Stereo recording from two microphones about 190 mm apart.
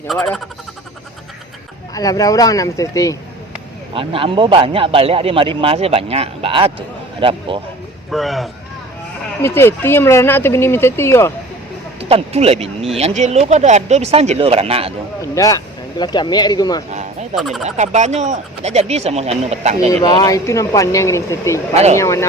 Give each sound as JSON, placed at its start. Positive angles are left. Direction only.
{"t": 0.2, "sound": "speech", "side_deg": 0}
{"t": 2.0, "sound": "speech", "side_deg": 20}
{"t": 3.9, "sound": "speech", "side_deg": -30}
{"t": 8.1, "sound": "speech", "side_deg": 0}
{"t": 9.6, "sound": "speech", "side_deg": 10}
{"t": 11.9, "sound": "speech", "side_deg": -30}
{"t": 15.2, "sound": "speech", "side_deg": 20}
{"t": 16.9, "sound": "bleat", "side_deg": -35}
{"t": 17.3, "sound": "speech", "side_deg": 0}
{"t": 17.6, "sound": "speech", "side_deg": -35}
{"t": 19.9, "sound": "speech", "side_deg": 20}